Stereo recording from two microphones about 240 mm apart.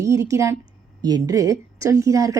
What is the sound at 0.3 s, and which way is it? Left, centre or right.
A woman's voice, centre.